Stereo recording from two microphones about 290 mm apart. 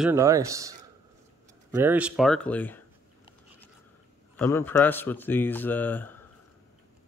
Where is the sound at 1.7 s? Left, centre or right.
Centre.